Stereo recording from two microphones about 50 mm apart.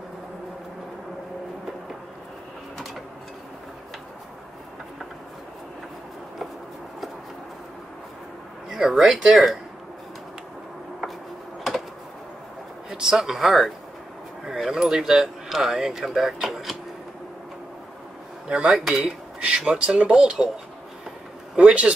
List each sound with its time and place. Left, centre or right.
8.6 s speech: centre
12.9 s speech: centre
18.7 s speech: centre
21.5 s speech: right